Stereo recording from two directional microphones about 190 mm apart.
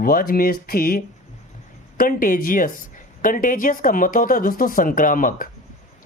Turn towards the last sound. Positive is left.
turn(degrees=45)  # may be behind; listen again after turning